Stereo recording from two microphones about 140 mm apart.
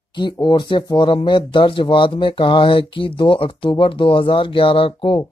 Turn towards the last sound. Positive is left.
turn(degrees=35)  # may be behind; listen again after turning